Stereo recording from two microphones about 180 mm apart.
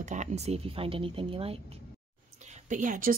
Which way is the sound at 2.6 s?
45° right (ahead or behind).